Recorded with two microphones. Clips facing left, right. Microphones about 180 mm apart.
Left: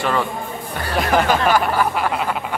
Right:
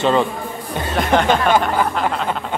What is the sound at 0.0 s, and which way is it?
Speech, 20° right (ahead or behind).